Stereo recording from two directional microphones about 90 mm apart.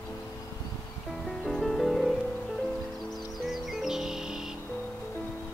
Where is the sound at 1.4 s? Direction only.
Centre (ahead or behind).